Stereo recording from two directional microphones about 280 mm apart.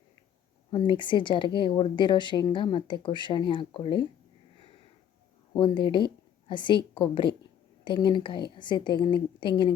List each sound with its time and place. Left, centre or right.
0.7 s speech: centre
5.5 s speech: centre